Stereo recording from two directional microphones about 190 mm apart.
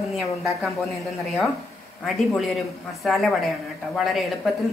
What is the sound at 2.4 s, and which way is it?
A woman's voice, centre (ahead or behind).